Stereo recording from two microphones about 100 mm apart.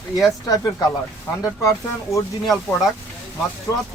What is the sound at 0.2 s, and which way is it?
Speech, 35° left (ahead or behind).